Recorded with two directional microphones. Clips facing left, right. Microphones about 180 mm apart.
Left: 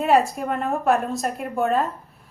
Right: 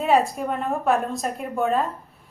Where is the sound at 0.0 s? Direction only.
Centre (ahead or behind).